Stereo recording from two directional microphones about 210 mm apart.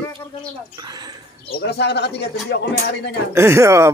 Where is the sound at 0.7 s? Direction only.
20° right (ahead or behind).